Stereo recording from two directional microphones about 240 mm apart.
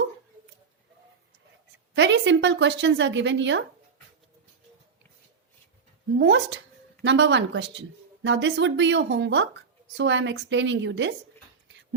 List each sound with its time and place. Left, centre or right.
2.0 s speech: right
6.1 s speech: right